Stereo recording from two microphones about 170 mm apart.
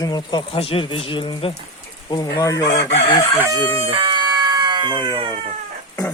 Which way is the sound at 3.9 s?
30° right (ahead or behind).